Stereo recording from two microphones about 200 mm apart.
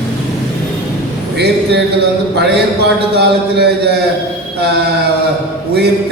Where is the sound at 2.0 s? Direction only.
55° right (ahead or behind).